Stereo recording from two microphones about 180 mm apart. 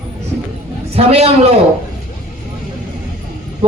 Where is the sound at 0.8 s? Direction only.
35° right (ahead or behind).